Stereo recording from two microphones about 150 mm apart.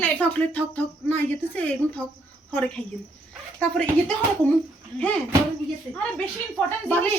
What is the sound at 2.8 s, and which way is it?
Speech, 35° left (ahead or behind).